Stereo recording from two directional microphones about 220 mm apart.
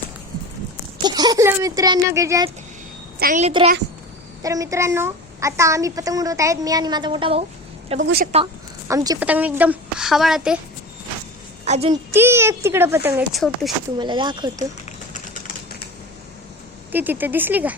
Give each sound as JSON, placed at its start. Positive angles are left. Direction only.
{"t": 1.0, "sound": "a woman's voice", "side_deg": -20}
{"t": 3.2, "sound": "a child's voice", "side_deg": -35}
{"t": 4.4, "sound": "a woman's voice", "side_deg": -15}
{"t": 8.0, "sound": "speech", "side_deg": -45}
{"t": 8.9, "sound": "a woman's voice", "side_deg": -15}
{"t": 11.6, "sound": "a woman's voice", "side_deg": -30}
{"t": 12.1, "sound": "a woman's voice", "side_deg": -10}
{"t": 14.0, "sound": "speech", "side_deg": -20}
{"t": 16.9, "sound": "a woman's voice", "side_deg": -10}